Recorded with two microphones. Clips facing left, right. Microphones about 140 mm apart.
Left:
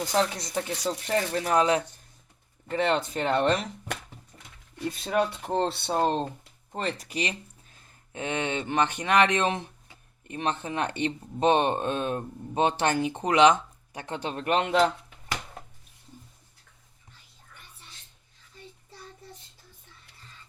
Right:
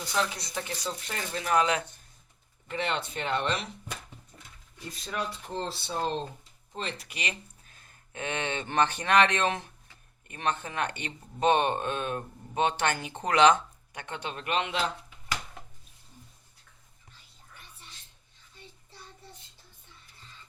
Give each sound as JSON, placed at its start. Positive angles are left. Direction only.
{"t": 0.0, "sound": "speech", "side_deg": 45}
{"t": 4.9, "sound": "speech", "side_deg": 60}
{"t": 6.7, "sound": "speech", "side_deg": 45}
{"t": 8.1, "sound": "speech", "side_deg": 20}
{"t": 13.9, "sound": "speech", "side_deg": 35}